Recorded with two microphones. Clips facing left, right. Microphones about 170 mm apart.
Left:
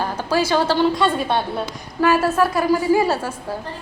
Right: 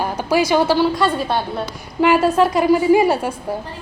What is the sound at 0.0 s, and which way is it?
A woman's voice, 15° right (ahead or behind).